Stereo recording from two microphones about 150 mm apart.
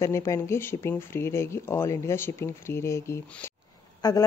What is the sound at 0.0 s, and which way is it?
Speech, 20° left (ahead or behind).